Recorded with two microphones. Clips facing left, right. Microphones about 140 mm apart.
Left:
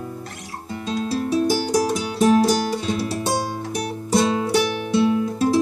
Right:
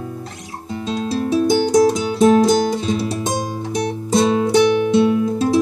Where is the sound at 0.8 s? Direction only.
25° right (ahead or behind).